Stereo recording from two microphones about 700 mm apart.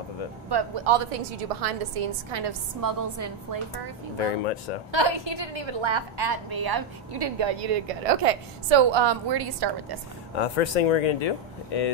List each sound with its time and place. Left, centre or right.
0.5 s a woman's voice: right
2.3 s a woman's voice: right
4.9 s a woman's voice: right
10.3 s speech: left